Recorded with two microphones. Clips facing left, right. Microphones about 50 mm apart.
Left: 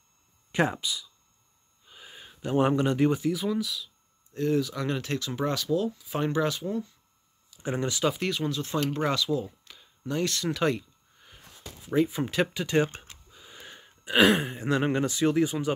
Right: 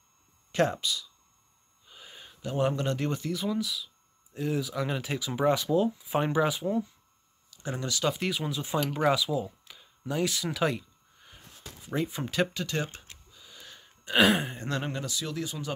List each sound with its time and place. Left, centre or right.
0.5 s speech: centre
1.9 s a sound: centre
2.4 s speech: left; by 6.9 s centre
7.6 s speech: left
8.0 s speech: centre
12.6 s a sound: left
14.0 s speech: centre
14.9 s speech: left